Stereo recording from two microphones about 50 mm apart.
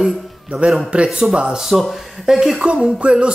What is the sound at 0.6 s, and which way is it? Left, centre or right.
Speech, right.